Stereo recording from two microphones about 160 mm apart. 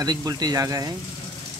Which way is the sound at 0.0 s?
25° right (ahead or behind).